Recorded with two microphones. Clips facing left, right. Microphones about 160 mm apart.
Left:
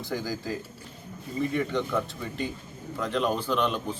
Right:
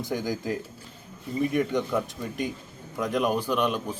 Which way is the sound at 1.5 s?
15° right (ahead or behind).